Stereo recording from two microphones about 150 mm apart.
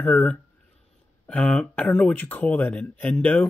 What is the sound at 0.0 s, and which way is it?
A man's voice, 5° left (ahead or behind).